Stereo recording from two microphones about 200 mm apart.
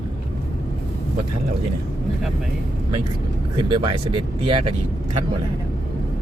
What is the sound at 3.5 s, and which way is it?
Speech, 25° right (ahead or behind).